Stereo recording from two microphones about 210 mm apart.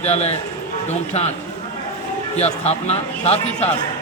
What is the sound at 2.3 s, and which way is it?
Speech, 30° left (ahead or behind).